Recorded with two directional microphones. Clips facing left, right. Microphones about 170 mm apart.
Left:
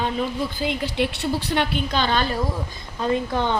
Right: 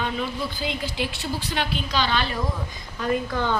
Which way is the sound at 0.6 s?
65° left (ahead or behind).